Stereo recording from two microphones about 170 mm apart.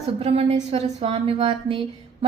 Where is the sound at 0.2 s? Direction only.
35° right (ahead or behind).